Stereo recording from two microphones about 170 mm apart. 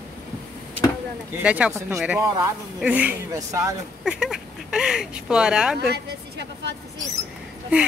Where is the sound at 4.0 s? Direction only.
5° right (ahead or behind).